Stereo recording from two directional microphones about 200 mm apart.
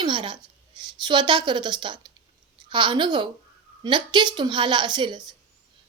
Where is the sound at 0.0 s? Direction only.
25° right (ahead or behind).